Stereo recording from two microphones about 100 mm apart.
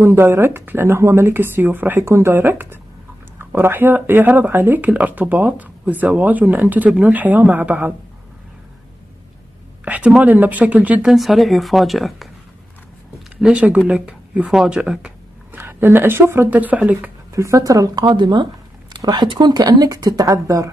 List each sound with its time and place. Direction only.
0.0 s speech: 25° right (ahead or behind)
9.8 s speech: 15° right (ahead or behind)
11.1 s speech: centre (ahead or behind)
13.4 s speech: 10° right (ahead or behind)
15.5 s speech: 20° right (ahead or behind)
17.3 s speech: 30° right (ahead or behind)